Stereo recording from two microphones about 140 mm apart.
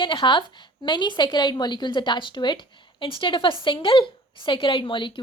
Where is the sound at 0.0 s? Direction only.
35° left (ahead or behind).